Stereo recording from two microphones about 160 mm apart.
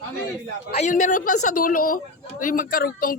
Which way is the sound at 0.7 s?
50° left (ahead or behind).